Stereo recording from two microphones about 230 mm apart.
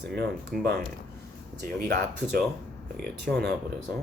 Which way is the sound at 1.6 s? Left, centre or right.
Right.